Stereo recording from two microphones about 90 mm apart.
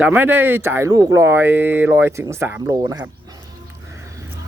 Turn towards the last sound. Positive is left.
turn(degrees=-45)  # may be behind; listen again after turning